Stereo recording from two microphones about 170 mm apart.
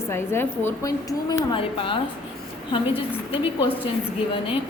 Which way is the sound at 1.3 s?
30° left (ahead or behind).